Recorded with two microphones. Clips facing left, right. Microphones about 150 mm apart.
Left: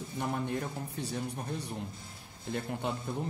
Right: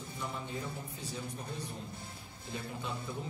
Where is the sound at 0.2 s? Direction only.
65° left (ahead or behind).